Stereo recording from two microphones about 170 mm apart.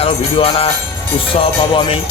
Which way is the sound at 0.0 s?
35° left (ahead or behind).